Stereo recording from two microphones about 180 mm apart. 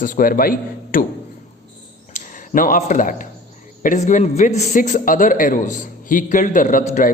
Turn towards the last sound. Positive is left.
turn(degrees=45)  # may be behind; listen again after turning